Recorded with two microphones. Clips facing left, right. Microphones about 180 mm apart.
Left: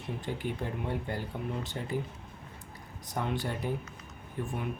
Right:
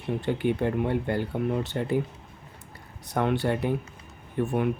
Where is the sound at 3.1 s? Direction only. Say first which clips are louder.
Right 8 dB; 65° right (ahead or behind).